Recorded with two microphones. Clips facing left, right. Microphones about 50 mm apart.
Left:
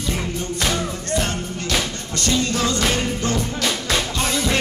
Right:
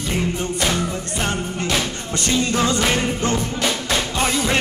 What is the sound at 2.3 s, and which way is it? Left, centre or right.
Music, right.